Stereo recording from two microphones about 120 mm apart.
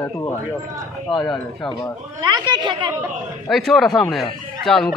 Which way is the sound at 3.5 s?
Centre (ahead or behind).